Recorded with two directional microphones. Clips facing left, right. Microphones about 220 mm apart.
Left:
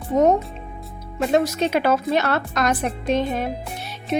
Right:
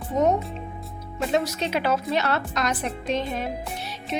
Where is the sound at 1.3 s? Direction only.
50° left (ahead or behind).